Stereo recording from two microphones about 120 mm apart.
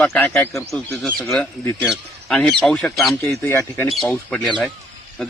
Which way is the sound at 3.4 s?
20° left (ahead or behind).